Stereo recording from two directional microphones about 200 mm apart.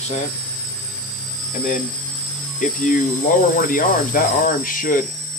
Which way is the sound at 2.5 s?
40° left (ahead or behind).